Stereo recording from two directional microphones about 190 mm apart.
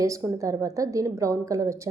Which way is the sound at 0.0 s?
15° right (ahead or behind).